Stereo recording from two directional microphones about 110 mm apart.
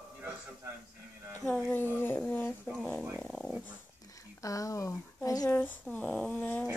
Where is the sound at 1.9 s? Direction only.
20° left (ahead or behind).